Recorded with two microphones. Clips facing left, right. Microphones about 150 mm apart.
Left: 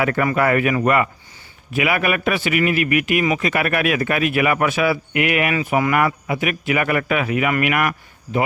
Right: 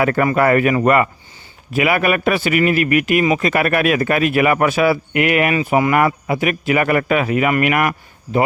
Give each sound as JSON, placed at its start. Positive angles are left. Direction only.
{"t": 0.0, "sound": "a man's voice", "side_deg": -40}